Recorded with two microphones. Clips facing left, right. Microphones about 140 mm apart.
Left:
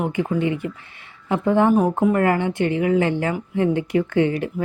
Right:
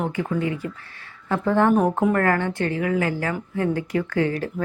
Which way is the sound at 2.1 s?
15° left (ahead or behind).